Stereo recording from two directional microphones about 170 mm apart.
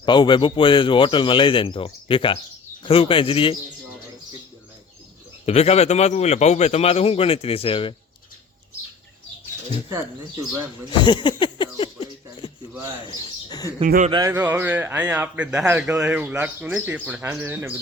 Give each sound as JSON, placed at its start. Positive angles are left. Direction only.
{"t": 0.0, "sound": "a man's voice", "side_deg": 25}
{"t": 5.5, "sound": "a man's voice", "side_deg": 40}
{"t": 11.0, "sound": "a sound", "side_deg": 25}
{"t": 13.1, "sound": "speech", "side_deg": 20}
{"t": 13.8, "sound": "speech", "side_deg": -55}
{"t": 14.1, "sound": "speech", "side_deg": -25}
{"t": 14.3, "sound": "speech", "side_deg": -10}